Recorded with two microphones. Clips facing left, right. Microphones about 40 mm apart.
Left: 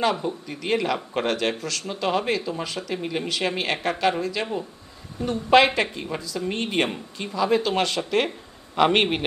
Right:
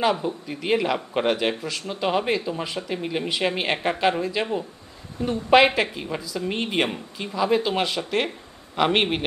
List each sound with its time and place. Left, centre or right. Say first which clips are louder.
0.0 s speech: right 1 dB; centre
2.9 s a man's voice: even; centre
3.3 s a woman's voice: right 2 dB; centre
5.5 s a man's voice: even; centre